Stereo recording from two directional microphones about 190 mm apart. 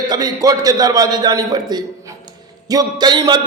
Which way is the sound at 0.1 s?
20° right (ahead or behind).